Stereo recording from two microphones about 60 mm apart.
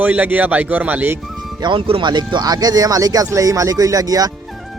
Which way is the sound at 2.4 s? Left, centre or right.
Right.